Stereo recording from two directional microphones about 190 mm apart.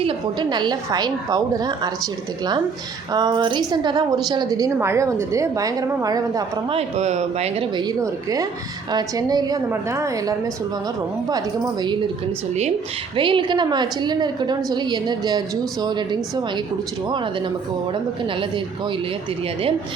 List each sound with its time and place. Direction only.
0.0 s a woman's voice: 25° right (ahead or behind)
3.1 s a woman's voice: 20° right (ahead or behind)
6.7 s a woman's voice: 35° right (ahead or behind)
13.1 s a woman's voice: 25° right (ahead or behind)